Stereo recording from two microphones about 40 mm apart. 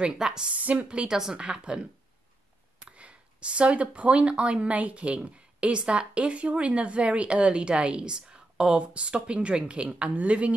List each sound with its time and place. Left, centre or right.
0.2 s a woman's voice: centre
0.6 s speech: right
0.8 s speech: right